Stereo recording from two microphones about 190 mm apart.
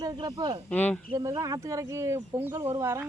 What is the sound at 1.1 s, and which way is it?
Speech, 20° right (ahead or behind).